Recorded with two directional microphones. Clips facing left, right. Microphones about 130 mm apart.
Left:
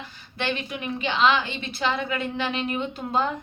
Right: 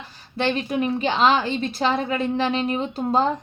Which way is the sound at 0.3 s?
40° right (ahead or behind).